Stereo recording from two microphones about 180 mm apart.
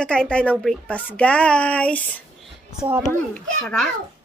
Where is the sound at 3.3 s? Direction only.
5° left (ahead or behind).